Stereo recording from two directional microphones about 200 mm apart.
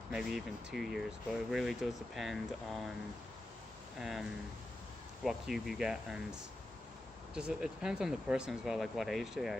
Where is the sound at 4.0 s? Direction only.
Centre (ahead or behind).